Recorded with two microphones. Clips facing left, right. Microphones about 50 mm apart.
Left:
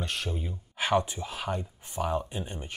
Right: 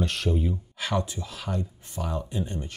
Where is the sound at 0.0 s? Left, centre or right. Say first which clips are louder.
Right 7 dB; centre.